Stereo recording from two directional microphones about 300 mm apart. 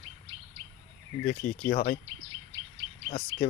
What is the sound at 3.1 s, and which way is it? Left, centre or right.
Speech, left.